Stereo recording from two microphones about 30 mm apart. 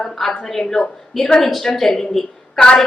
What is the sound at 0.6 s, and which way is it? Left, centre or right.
Speech, left.